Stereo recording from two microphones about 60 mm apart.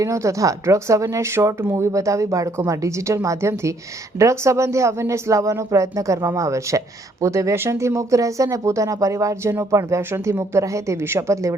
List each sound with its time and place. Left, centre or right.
0.0 s speech: right
10.1 s speech: right
11.0 s speech: right